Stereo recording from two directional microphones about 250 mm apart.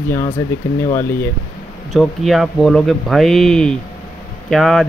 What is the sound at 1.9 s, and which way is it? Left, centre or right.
Speech, centre.